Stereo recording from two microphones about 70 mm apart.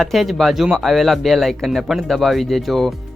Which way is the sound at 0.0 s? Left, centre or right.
Centre.